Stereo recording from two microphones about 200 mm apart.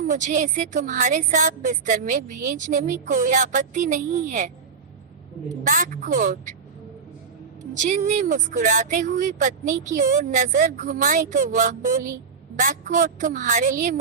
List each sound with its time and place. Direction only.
0.1 s a woman's voice: 40° right (ahead or behind)
5.6 s a woman's voice: 40° right (ahead or behind)
7.7 s a woman's voice: 40° right (ahead or behind)